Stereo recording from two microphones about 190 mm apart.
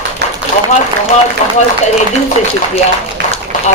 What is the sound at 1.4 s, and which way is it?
Speech, 40° left (ahead or behind).